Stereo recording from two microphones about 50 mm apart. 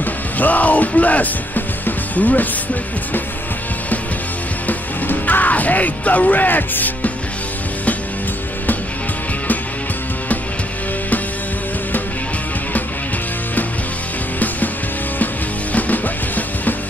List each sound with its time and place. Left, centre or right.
0.0 s music: left
4.6 s music: left
15.7 s music: left